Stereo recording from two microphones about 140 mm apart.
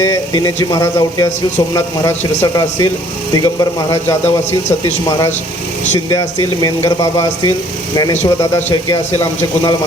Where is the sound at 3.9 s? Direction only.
15° left (ahead or behind).